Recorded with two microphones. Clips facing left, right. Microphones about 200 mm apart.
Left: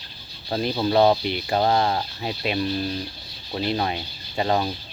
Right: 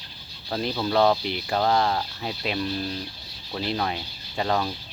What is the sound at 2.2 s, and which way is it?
Speech, 5° left (ahead or behind).